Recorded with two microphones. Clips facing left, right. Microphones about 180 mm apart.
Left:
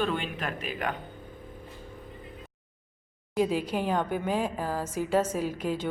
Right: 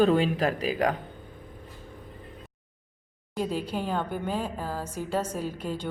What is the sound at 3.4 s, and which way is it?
Music, 10° left (ahead or behind).